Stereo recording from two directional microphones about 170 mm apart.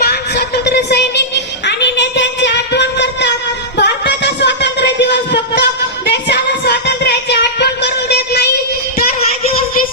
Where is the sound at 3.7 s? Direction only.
90° left; by 9.0 s 70° left (ahead or behind).